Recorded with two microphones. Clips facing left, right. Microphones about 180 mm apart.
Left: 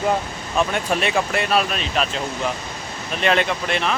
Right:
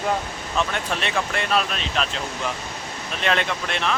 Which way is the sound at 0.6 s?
10° left (ahead or behind).